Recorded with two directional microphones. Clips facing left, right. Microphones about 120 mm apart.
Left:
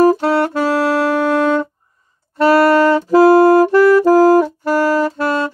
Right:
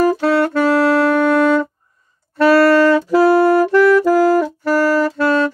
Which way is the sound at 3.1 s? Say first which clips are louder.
Left 3 dB; 40° left (ahead or behind).